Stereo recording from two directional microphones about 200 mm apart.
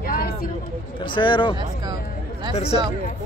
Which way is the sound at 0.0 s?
45° left (ahead or behind).